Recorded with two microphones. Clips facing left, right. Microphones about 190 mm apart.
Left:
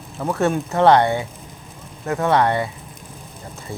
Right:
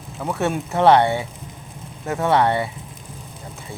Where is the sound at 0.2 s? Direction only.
Centre (ahead or behind).